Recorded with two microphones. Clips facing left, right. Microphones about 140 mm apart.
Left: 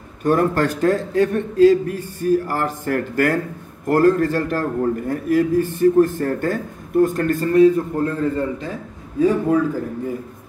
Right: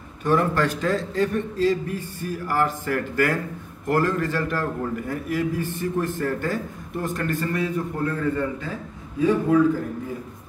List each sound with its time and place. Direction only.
0.2 s a man's voice: 45° left (ahead or behind)